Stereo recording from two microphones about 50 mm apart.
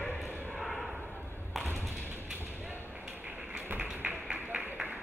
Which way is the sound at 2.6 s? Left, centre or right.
Right.